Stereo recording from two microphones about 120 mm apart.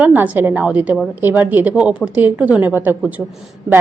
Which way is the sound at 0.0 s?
15° right (ahead or behind).